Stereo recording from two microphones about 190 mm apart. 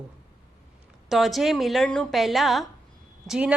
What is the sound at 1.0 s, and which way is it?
A man's voice, centre (ahead or behind).